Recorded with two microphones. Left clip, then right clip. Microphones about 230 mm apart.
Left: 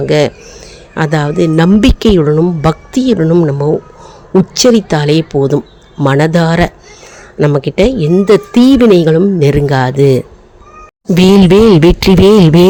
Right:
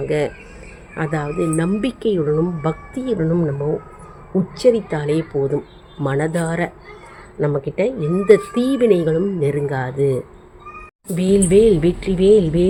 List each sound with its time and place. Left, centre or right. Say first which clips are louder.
0.0 s a woman's voice: left 10 dB; left